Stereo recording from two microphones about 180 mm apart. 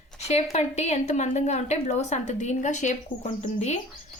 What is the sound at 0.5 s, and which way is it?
A woman's voice, 40° left (ahead or behind).